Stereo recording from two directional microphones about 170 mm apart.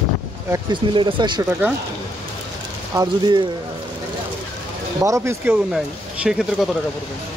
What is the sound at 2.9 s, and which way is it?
Speech, 25° right (ahead or behind).